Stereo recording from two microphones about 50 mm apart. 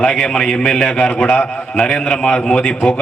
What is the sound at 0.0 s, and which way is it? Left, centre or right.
A man's voice, centre.